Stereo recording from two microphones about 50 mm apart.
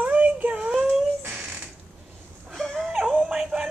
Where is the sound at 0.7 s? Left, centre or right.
Centre.